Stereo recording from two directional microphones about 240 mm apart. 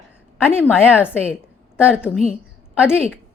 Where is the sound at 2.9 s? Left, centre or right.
Centre.